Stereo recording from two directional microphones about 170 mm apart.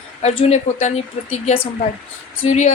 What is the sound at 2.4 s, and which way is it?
Speech, 40° left (ahead or behind).